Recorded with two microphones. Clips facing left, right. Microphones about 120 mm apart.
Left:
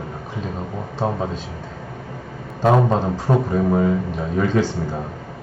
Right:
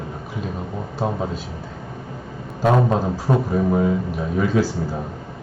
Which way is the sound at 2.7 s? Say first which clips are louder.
Left 1 dB; 10° left (ahead or behind).